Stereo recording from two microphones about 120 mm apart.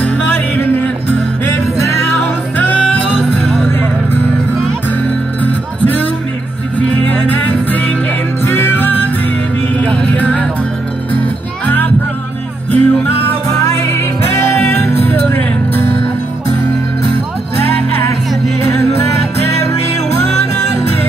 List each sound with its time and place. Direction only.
0.0 s music: 15° left (ahead or behind)
3.4 s music: centre (ahead or behind)
5.4 s music: 15° left (ahead or behind)
7.1 s music: 15° left (ahead or behind)
11.6 s music: 15° left (ahead or behind)